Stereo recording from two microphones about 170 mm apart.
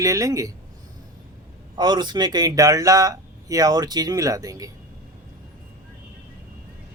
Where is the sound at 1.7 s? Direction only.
25° right (ahead or behind).